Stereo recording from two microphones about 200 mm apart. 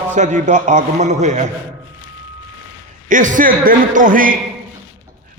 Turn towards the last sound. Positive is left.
turn(degrees=-45)  # may be behind; listen again after turning